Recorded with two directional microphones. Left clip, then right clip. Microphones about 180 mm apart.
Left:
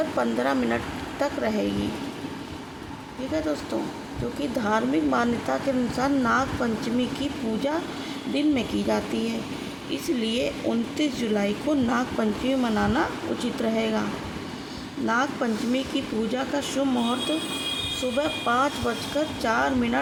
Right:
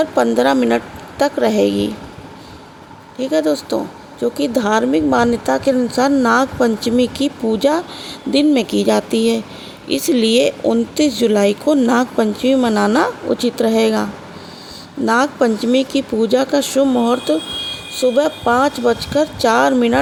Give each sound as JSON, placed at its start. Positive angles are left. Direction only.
{"t": 0.2, "sound": "speech", "side_deg": -45}
{"t": 3.3, "sound": "speech", "side_deg": -45}
{"t": 15.0, "sound": "speech", "side_deg": -50}